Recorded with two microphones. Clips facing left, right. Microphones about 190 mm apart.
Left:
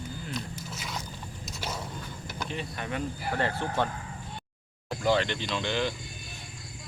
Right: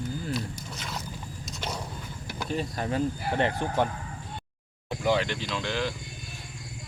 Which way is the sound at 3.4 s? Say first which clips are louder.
Right 3 dB; 15° right (ahead or behind).